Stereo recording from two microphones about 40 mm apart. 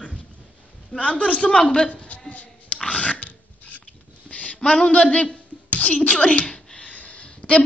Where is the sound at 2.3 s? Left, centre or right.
Left.